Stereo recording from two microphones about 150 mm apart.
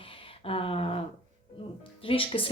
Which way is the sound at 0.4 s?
40° left (ahead or behind).